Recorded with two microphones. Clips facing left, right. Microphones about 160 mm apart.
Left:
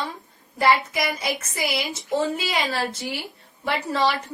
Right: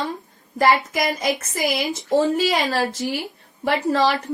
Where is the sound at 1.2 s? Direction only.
40° right (ahead or behind).